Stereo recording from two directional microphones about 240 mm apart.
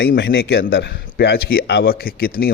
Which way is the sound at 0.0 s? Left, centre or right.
Left.